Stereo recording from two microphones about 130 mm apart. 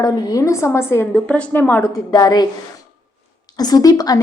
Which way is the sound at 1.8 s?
30° left (ahead or behind).